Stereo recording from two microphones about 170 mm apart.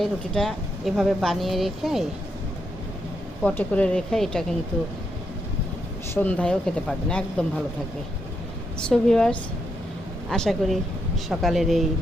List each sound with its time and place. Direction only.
0.0 s speech: centre (ahead or behind)
3.4 s speech: 10° left (ahead or behind)
6.1 s speech: 10° left (ahead or behind)
8.9 s speech: 5° left (ahead or behind)